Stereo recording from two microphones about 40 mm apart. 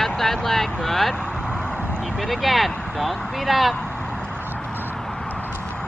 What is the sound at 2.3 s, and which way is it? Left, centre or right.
Speech, centre.